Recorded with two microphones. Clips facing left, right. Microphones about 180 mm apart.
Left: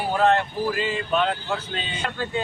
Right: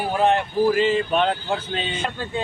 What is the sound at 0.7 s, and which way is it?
Speech, 30° right (ahead or behind).